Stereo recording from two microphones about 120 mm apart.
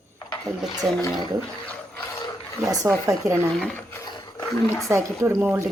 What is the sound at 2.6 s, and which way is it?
Speech, 25° right (ahead or behind).